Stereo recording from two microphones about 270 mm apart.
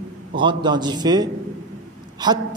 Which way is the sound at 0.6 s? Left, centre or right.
Centre.